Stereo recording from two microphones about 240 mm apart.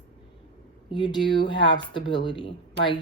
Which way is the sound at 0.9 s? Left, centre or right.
Centre.